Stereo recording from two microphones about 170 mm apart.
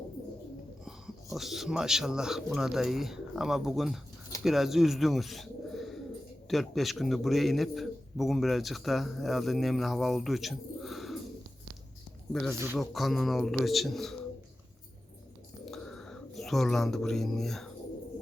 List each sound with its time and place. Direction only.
0.9 s a man's voice: centre (ahead or behind)
12.3 s a man's voice: centre (ahead or behind)
15.6 s a sound: centre (ahead or behind)